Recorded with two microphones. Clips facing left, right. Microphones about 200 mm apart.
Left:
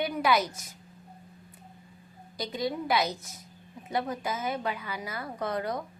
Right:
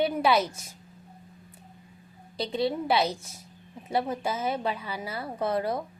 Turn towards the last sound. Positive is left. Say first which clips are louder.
# right 4 dB
turn(degrees=-25)  # may be behind; listen again after turning